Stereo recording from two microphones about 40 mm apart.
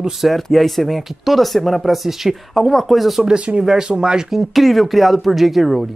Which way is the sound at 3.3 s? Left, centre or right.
Right.